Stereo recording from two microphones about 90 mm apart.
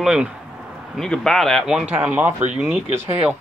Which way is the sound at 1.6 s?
10° right (ahead or behind).